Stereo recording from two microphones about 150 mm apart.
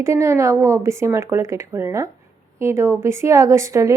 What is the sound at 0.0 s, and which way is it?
A woman's voice, 20° right (ahead or behind).